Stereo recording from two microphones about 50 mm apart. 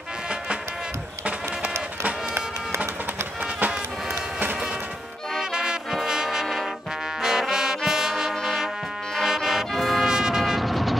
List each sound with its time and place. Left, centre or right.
3.5 s music: right
5.4 s music: centre
6.4 s trombone: centre
7.2 s music: centre
10.0 s vehicle: centre